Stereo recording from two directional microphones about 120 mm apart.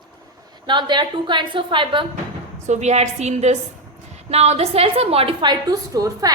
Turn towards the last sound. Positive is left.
turn(degrees=-30)  # may be behind; listen again after turning